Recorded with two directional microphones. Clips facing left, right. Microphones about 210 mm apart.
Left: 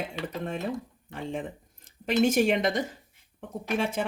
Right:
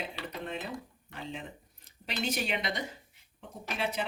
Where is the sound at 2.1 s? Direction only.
50° left (ahead or behind).